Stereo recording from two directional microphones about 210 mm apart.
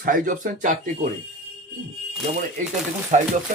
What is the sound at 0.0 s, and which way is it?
Speech, 40° right (ahead or behind).